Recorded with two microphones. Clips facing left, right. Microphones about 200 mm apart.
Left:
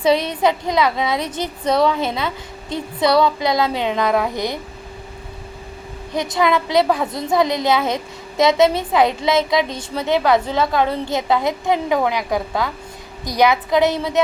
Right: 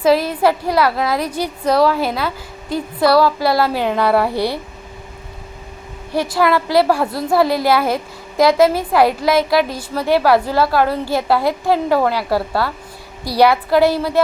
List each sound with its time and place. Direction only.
0.0 s a woman's voice: 5° right (ahead or behind)
6.1 s a woman's voice: 5° right (ahead or behind)
11.6 s a woman's voice: 20° left (ahead or behind)
13.7 s a woman's voice: 5° right (ahead or behind)